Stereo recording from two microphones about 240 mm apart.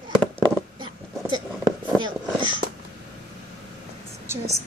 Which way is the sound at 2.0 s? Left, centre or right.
Centre.